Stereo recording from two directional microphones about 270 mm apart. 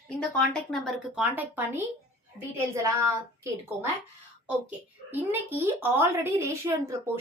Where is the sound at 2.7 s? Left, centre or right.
Centre.